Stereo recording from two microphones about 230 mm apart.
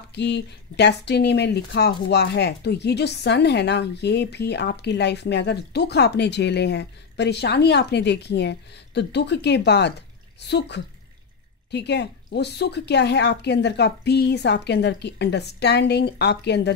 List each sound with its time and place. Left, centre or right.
0.1 s speech: left